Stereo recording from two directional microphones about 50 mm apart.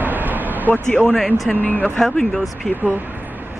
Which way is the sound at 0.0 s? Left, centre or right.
Right.